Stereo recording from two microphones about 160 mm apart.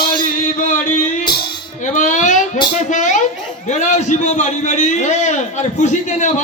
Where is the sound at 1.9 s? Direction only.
50° left (ahead or behind).